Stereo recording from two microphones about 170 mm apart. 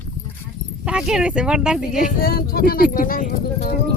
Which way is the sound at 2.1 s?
60° left (ahead or behind).